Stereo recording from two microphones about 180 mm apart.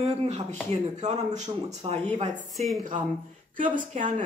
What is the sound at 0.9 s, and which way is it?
Speech, 40° right (ahead or behind).